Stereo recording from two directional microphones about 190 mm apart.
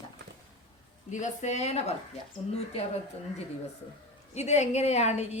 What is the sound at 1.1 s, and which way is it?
Speech, 40° left (ahead or behind).